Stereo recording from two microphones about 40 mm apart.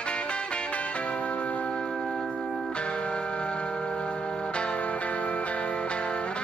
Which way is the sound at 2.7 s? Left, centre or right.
Left.